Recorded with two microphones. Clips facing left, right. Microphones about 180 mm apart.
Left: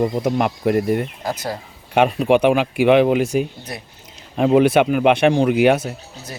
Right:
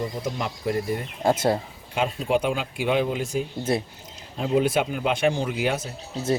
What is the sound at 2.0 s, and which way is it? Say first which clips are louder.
A man's voice: left 9 dB; 70° left (ahead or behind).